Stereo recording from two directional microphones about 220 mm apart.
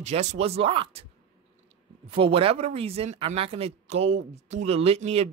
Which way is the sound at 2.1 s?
25° right (ahead or behind).